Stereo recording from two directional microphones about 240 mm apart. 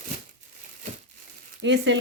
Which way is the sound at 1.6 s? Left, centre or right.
Right.